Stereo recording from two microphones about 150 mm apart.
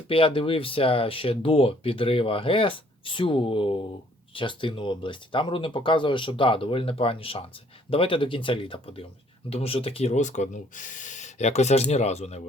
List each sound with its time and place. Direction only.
0.1 s speech: 35° left (ahead or behind)